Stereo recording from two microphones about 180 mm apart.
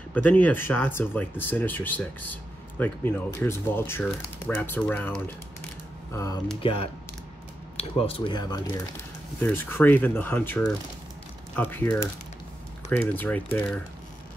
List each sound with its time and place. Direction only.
0.1 s speech: 10° left (ahead or behind)
6.6 s speech: 30° left (ahead or behind)
9.4 s speech: 10° left (ahead or behind)